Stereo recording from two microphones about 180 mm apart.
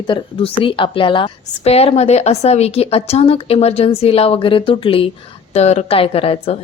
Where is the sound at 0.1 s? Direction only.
30° left (ahead or behind).